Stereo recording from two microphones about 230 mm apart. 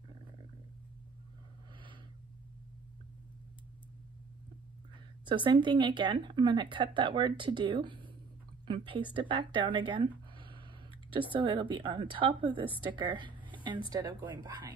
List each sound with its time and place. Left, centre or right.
5.2 s a woman's voice: right